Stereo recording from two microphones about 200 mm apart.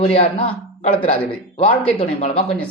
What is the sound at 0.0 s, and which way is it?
Speech, 30° left (ahead or behind).